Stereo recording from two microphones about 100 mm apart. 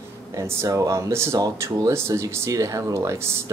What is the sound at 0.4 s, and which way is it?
Speech, 30° right (ahead or behind).